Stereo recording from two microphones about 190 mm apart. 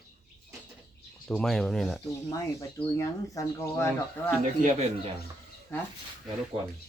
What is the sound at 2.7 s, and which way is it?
Speech, 15° left (ahead or behind).